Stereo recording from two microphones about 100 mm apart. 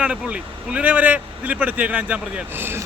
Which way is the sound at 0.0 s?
10° right (ahead or behind).